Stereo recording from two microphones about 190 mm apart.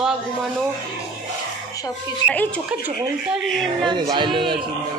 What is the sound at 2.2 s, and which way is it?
Speech, 10° left (ahead or behind).